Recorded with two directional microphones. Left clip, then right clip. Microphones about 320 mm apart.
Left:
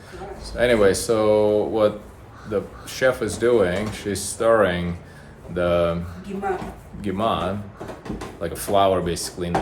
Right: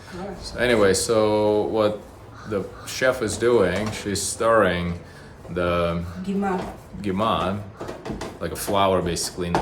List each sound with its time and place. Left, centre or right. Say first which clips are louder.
0.1 s speech: right 1 dB; centre
7.0 s speech: even; centre